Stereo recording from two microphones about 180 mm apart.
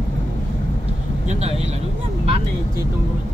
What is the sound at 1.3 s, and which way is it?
Vehicle, 35° right (ahead or behind).